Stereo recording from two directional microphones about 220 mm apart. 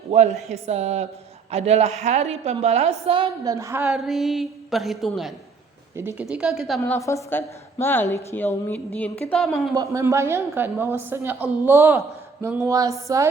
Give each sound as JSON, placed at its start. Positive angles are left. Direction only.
{"t": 0.1, "sound": "speech", "side_deg": -30}
{"t": 0.4, "sound": "a sound", "side_deg": -30}
{"t": 2.0, "sound": "a woman's voice", "side_deg": -30}
{"t": 6.0, "sound": "a woman's voice", "side_deg": -10}
{"t": 9.7, "sound": "a woman's voice", "side_deg": -15}